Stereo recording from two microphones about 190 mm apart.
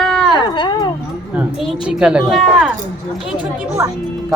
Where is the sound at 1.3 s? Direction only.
Centre (ahead or behind).